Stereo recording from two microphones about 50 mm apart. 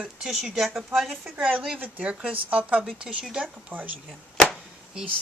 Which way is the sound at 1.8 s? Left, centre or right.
Right.